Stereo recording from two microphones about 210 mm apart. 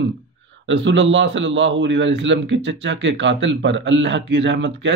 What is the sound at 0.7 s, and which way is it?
Speech, 60° right (ahead or behind).